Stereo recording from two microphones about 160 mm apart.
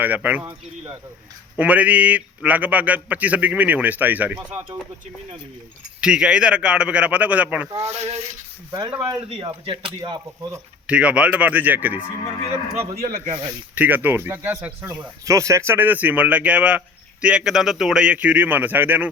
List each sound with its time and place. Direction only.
0.0 s speech: 10° right (ahead or behind)
1.5 s speech: 10° right (ahead or behind)
6.0 s speech: 5° right (ahead or behind)
7.8 s speech: 40° right (ahead or behind)
8.7 s speech: 25° right (ahead or behind)
10.0 s speech: 25° right (ahead or behind)
10.8 s speech: 5° right (ahead or behind)
12.9 s speech: 60° right (ahead or behind)
13.7 s speech: 10° right (ahead or behind)